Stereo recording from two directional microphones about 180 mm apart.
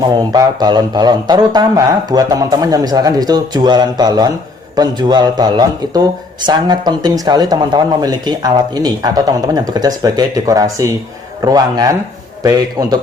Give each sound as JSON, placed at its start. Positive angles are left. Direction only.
{"t": 0.3, "sound": "a man's voice", "side_deg": -20}